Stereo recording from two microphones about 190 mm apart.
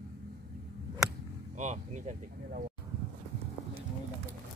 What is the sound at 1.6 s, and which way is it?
Speech, 40° right (ahead or behind).